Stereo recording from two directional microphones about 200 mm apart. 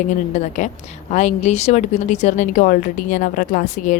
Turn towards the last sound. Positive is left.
turn(degrees=40)  # may be behind; listen again after turning